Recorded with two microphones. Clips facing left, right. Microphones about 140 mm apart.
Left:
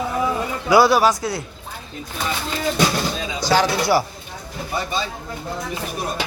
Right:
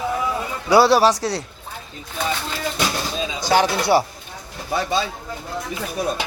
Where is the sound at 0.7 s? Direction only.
30° right (ahead or behind).